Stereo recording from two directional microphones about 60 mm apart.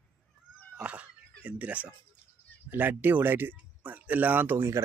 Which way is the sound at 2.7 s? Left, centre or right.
Right.